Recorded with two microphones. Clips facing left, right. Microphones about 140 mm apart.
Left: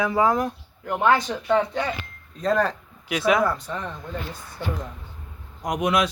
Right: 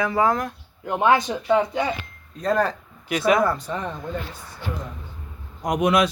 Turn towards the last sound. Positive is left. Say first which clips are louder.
# right 3 dB
turn(degrees=-45)  # may be behind; listen again after turning